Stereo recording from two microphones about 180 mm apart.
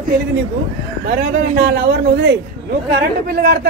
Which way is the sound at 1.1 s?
60° right (ahead or behind).